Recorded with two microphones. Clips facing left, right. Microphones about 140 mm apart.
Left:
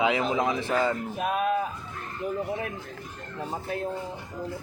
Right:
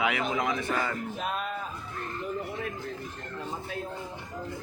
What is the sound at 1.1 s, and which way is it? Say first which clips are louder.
Speech: left 7 dB; 65° left (ahead or behind).